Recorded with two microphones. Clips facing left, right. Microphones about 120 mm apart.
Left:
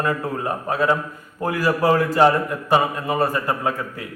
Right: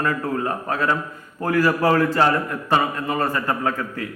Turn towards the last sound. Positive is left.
turn(degrees=15)  # may be behind; listen again after turning